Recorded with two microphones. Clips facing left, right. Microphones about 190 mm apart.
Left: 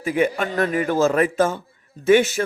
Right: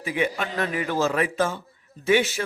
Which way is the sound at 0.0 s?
45° left (ahead or behind).